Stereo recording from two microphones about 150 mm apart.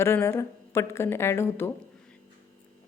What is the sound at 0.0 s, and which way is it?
A woman's voice, 15° left (ahead or behind).